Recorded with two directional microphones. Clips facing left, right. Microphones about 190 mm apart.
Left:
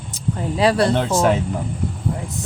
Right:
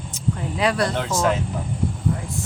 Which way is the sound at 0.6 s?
30° left (ahead or behind).